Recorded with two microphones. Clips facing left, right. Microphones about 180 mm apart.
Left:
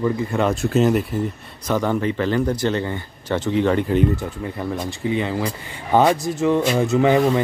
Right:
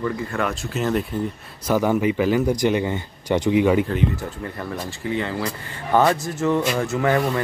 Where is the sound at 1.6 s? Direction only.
10° right (ahead or behind).